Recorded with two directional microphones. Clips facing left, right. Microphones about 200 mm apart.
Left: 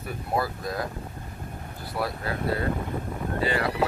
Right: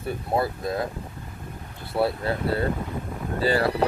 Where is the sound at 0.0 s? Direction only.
25° right (ahead or behind).